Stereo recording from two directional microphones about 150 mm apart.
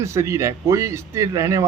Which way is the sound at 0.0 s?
20° right (ahead or behind).